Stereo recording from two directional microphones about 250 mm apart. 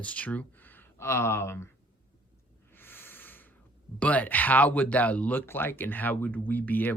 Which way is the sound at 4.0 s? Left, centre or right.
Centre.